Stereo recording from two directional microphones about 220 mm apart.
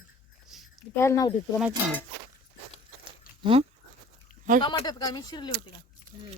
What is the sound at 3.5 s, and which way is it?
Speech, 25° right (ahead or behind).